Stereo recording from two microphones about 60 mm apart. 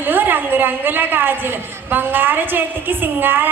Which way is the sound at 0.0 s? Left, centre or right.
Right.